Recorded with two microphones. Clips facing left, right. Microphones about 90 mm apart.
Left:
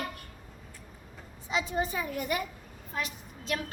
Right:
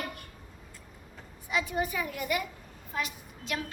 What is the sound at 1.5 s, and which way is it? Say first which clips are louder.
A child's voice: even; 25° left (ahead or behind).